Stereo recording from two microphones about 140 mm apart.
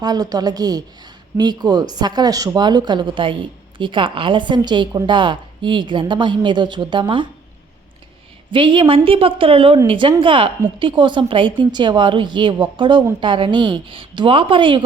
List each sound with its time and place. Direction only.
0.0 s a woman's voice: 30° right (ahead or behind)
8.4 s a woman's voice: 35° right (ahead or behind)